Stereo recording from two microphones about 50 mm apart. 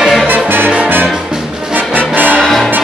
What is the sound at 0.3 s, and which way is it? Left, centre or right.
Music, right.